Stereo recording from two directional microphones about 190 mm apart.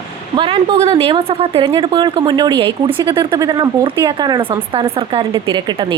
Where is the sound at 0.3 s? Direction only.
25° right (ahead or behind).